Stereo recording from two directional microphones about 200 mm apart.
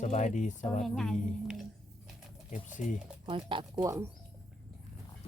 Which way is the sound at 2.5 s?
40° left (ahead or behind).